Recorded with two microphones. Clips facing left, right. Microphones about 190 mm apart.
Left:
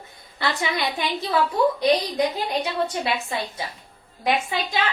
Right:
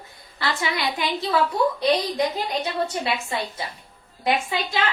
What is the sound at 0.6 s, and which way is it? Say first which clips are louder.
Speech: right 1 dB; 20° left (ahead or behind).